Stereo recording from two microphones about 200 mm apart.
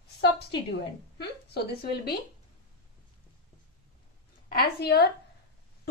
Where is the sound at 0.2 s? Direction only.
55° left (ahead or behind).